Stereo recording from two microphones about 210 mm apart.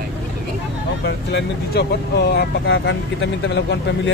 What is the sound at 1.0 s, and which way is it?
Speech, 55° left (ahead or behind).